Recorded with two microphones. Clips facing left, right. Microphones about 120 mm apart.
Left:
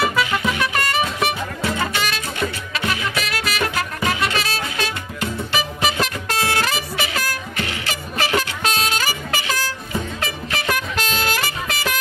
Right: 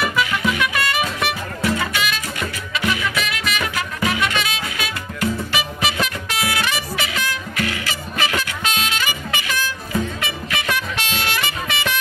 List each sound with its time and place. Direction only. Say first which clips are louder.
0.0 s music: left 1 dB; 30° left (ahead or behind)
0.7 s music: left 1 dB; 40° left (ahead or behind)
1.6 s music: right 3 dB; 30° left (ahead or behind)
7.5 s music: right 2 dB; 25° left (ahead or behind)